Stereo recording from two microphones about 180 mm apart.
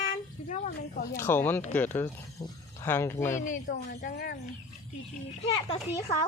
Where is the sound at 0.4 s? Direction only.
40° left (ahead or behind).